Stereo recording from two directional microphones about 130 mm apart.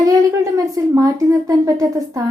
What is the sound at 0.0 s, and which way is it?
A woman's voice, 25° right (ahead or behind).